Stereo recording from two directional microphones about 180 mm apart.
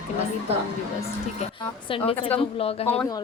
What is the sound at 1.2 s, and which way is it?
Speech, 30° left (ahead or behind).